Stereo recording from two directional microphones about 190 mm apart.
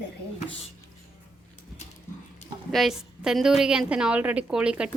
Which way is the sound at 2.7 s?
Centre (ahead or behind).